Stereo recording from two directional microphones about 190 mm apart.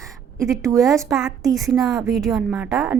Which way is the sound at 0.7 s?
Centre (ahead or behind).